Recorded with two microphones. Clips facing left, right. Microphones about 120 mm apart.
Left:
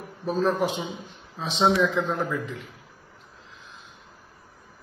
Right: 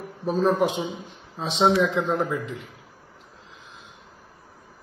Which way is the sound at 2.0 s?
10° right (ahead or behind).